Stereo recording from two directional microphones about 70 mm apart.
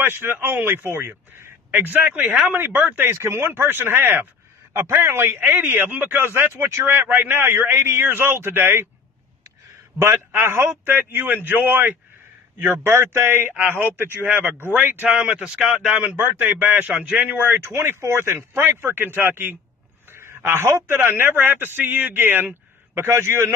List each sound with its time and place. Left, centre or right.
0.0 s a man's voice: right
9.9 s a man's voice: right
15.3 s speech: centre
16.3 s a man's voice: right
17.6 s a man's voice: right
20.1 s a sound: right
20.7 s a man's voice: right